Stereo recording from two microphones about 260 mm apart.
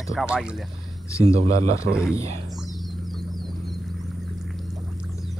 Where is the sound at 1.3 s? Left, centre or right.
Right.